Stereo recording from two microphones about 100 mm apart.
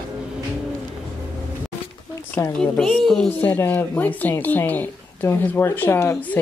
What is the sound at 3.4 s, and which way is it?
Speech, 15° left (ahead or behind).